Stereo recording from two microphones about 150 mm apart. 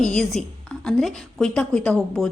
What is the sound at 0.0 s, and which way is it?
Speech, 5° left (ahead or behind).